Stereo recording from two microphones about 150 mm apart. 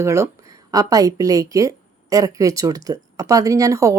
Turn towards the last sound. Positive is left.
turn(degrees=-20)  # may be behind; listen again after turning